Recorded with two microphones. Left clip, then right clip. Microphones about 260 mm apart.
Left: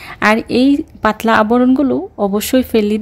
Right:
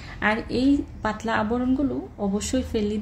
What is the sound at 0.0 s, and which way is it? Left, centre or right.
A woman's voice, left.